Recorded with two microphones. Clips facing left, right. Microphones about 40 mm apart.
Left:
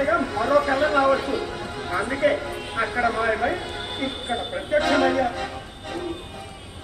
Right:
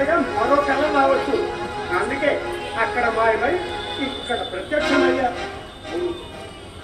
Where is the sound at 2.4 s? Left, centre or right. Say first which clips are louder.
Right 4 dB; right.